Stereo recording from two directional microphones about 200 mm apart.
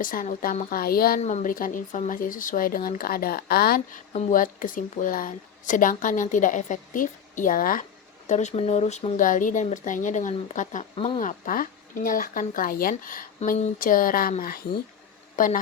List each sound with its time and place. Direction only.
0.0 s speech: 45° left (ahead or behind)
1.2 s speech: 35° left (ahead or behind)
4.1 s speech: 40° left (ahead or behind)
10.9 s speech: 25° left (ahead or behind)
11.2 s speech: 40° left (ahead or behind)